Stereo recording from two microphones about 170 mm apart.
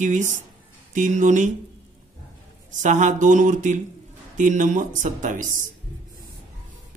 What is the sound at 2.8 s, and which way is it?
Speech, 45° right (ahead or behind).